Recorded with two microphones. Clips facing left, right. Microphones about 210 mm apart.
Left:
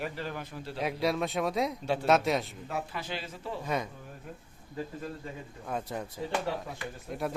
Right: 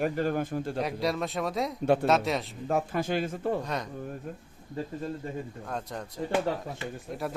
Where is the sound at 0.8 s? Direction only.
Centre (ahead or behind).